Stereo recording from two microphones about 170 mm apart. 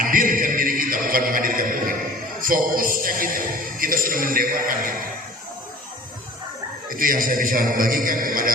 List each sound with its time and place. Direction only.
0.0 s music: 55° right (ahead or behind)
2.4 s speech: 55° right (ahead or behind)
6.8 s speech: 55° right (ahead or behind)